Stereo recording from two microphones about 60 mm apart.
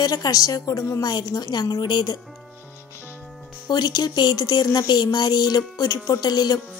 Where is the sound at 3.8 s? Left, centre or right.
Left.